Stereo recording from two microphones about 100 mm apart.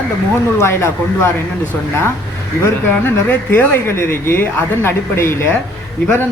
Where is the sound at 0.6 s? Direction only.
25° left (ahead or behind).